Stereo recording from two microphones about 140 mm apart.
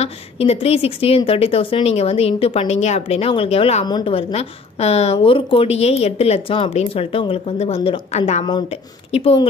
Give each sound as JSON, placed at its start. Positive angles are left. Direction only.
{"t": 0.0, "sound": "a woman's voice", "side_deg": 45}
{"t": 3.8, "sound": "a woman's voice", "side_deg": 30}
{"t": 4.1, "sound": "a woman's voice", "side_deg": 45}